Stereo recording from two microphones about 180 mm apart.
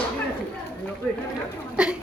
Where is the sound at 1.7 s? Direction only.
5° right (ahead or behind).